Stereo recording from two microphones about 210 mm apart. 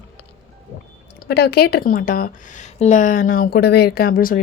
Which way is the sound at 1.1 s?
50° left (ahead or behind).